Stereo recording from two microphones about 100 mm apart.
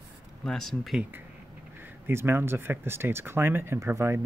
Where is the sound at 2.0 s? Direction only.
20° right (ahead or behind).